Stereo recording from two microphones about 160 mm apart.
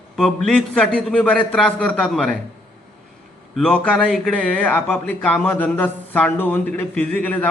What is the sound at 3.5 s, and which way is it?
Speech, 5° left (ahead or behind).